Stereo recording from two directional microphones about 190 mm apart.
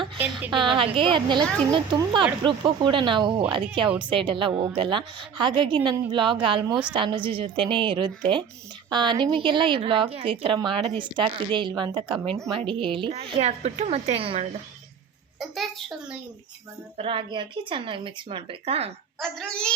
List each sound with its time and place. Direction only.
0.2 s a woman's voice: 10° right (ahead or behind)
0.5 s a woman's voice: 25° right (ahead or behind)
3.8 s a woman's voice: 5° right (ahead or behind)
4.1 s a woman's voice: 25° right (ahead or behind)
12.3 s a child's voice: centre (ahead or behind)
12.5 s a woman's voice: 25° right (ahead or behind)
15.4 s a child's voice: centre (ahead or behind)
17.0 s a woman's voice: 25° right (ahead or behind)
19.2 s a child's voice: 5° left (ahead or behind)